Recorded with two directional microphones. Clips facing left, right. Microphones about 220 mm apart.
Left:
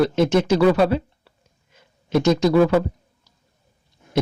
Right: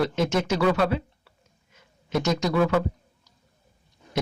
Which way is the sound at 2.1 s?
30° left (ahead or behind).